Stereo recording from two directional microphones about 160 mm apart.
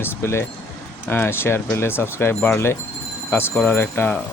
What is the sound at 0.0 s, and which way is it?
Speech, 15° left (ahead or behind).